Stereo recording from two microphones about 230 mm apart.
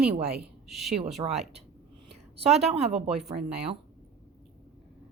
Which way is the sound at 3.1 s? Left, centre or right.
Centre.